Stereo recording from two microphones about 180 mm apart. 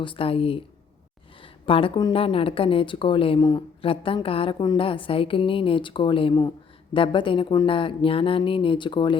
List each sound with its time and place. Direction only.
0.0 s speech: 30° left (ahead or behind)
1.6 s a woman's voice: 30° left (ahead or behind)